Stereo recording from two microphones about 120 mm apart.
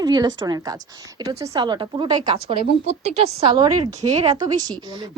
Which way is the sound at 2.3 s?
55° right (ahead or behind).